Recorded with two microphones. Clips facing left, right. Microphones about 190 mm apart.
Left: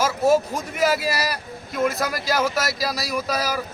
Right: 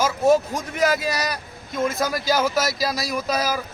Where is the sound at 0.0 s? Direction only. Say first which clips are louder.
Right 1 dB; 5° left (ahead or behind).